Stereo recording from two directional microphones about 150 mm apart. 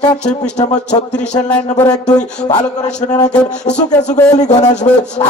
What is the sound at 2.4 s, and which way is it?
Speech, 50° left (ahead or behind).